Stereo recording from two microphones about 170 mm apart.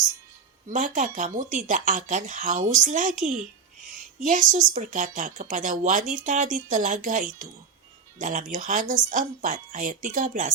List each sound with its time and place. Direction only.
0.7 s a woman's voice: 50° right (ahead or behind)